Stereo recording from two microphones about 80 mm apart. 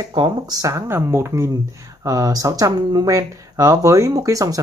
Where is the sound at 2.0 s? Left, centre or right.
Right.